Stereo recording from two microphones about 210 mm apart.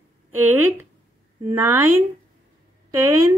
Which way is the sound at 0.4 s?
10° right (ahead or behind).